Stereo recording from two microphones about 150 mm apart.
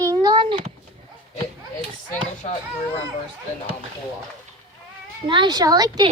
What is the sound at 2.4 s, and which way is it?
Speech, 50° left (ahead or behind).